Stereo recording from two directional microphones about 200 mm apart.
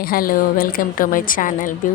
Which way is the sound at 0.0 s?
45° left (ahead or behind).